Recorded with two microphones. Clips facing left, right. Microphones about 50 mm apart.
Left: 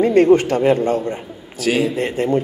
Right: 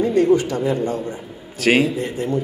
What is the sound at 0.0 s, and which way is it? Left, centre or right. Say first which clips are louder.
A man's voice: left 4 dB; left.